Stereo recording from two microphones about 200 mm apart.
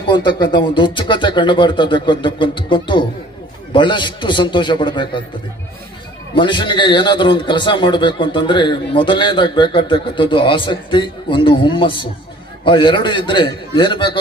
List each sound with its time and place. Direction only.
0.1 s a man's voice: 25° left (ahead or behind)
6.3 s a man's voice: 25° left (ahead or behind)